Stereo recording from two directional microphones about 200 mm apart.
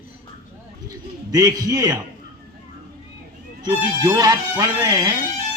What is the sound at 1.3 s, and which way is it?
Speech, 20° right (ahead or behind).